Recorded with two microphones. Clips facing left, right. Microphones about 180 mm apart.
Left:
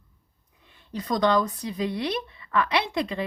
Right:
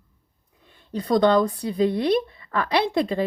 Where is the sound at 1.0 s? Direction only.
35° right (ahead or behind).